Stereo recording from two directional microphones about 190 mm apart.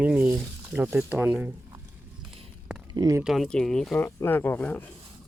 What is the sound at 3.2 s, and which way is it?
Speech, centre (ahead or behind).